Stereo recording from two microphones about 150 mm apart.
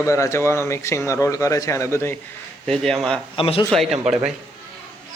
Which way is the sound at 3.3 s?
40° left (ahead or behind).